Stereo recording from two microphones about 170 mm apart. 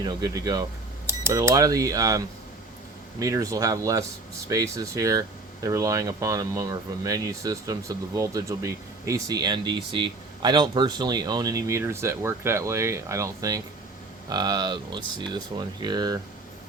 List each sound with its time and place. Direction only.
0.0 s speech: 20° right (ahead or behind)